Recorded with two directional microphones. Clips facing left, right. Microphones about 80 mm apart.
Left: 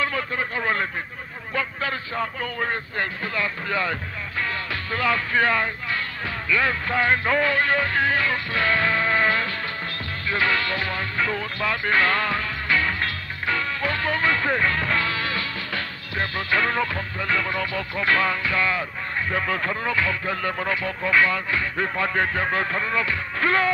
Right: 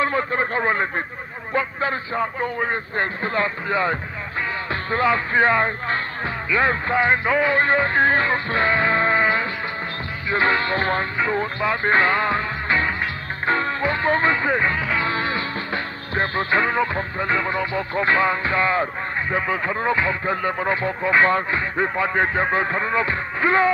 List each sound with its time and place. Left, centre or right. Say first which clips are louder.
0.0 s a sound: right 5 dB; right
2.6 s speech: right 1 dB; right
7.5 s music: right 4 dB; right
10.3 s speech: right 4 dB; right
11.3 s music: right 4 dB; right; by 15.0 s centre
15.0 s music: right 3 dB; right
16.6 s speech: right 3 dB; right
19.3 s speech: right 3 dB; centre